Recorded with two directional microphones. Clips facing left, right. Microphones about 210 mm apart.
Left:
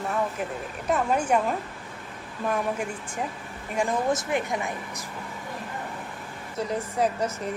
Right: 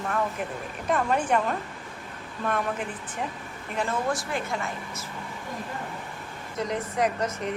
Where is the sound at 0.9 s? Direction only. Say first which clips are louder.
Left 1 dB; 10° left (ahead or behind).